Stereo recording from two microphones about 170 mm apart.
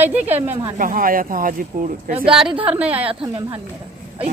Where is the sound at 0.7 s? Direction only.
55° right (ahead or behind).